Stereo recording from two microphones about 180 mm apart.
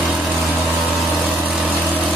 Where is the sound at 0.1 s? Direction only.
Centre (ahead or behind).